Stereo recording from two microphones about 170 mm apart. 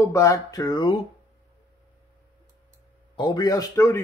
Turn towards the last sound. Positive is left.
turn(degrees=15)  # may be behind; listen again after turning